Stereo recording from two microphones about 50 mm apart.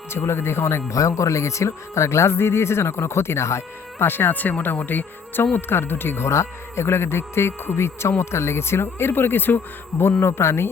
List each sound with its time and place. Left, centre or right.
0.2 s speech: left
5.5 s speech: left
6.3 s speech: left